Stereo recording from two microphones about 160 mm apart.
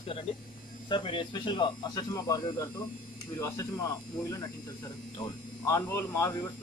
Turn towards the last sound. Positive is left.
turn(degrees=15)  # may be behind; listen again after turning